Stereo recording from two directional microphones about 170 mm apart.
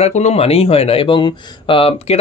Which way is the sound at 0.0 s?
40° left (ahead or behind).